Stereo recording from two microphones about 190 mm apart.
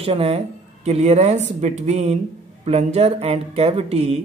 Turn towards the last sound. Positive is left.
turn(degrees=-35)  # may be behind; listen again after turning